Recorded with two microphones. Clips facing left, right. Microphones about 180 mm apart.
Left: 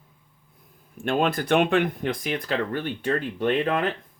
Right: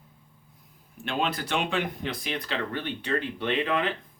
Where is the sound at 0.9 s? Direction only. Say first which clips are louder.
Left 6 dB; 50° left (ahead or behind).